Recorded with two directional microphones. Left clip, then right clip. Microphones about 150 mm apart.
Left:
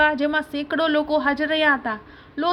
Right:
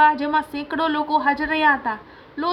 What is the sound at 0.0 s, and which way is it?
A woman's voice, 35° left (ahead or behind).